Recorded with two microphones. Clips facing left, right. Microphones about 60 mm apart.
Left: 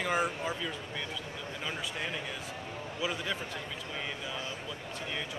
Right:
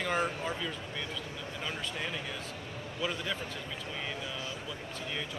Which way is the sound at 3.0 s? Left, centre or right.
Centre.